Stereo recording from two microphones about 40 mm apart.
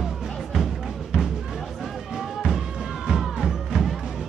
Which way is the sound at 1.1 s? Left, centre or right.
Right.